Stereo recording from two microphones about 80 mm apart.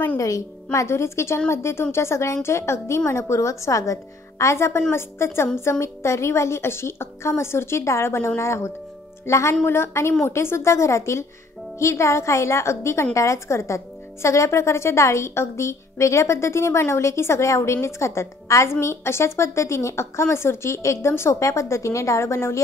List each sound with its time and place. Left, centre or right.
0.7 s a woman's voice: left